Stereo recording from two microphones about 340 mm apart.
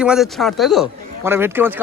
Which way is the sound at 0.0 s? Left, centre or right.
Centre.